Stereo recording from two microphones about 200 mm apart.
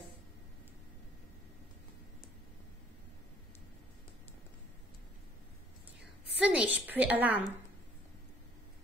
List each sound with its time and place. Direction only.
6.4 s a woman's voice: 5° right (ahead or behind)